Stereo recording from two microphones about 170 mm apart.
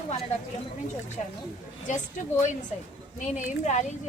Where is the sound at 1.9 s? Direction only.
45° left (ahead or behind).